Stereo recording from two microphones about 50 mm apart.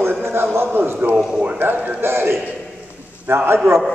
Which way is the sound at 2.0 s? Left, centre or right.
Right.